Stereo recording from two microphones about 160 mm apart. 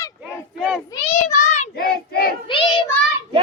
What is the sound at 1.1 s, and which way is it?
Child singing, 45° left (ahead or behind).